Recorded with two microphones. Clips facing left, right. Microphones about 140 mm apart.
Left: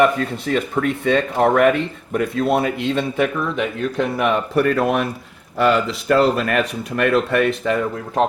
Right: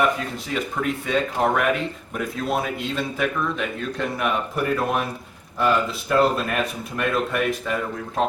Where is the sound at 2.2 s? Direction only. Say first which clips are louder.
Left 6 dB; 65° left (ahead or behind).